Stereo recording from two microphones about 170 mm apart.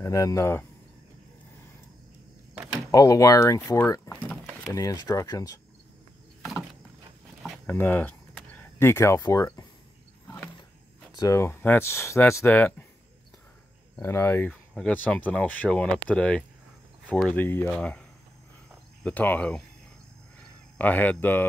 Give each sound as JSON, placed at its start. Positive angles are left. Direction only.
{"t": 0.0, "sound": "speech", "side_deg": 20}
{"t": 2.9, "sound": "speech", "side_deg": 20}
{"t": 4.7, "sound": "speech", "side_deg": 20}
{"t": 6.4, "sound": "a sound", "side_deg": 0}
{"t": 7.6, "sound": "speech", "side_deg": 10}
{"t": 10.2, "sound": "wild animals", "side_deg": 10}
{"t": 11.1, "sound": "speech", "side_deg": 20}
{"t": 13.9, "sound": "speech", "side_deg": 15}
{"t": 19.0, "sound": "speech", "side_deg": 10}
{"t": 20.7, "sound": "speech", "side_deg": 10}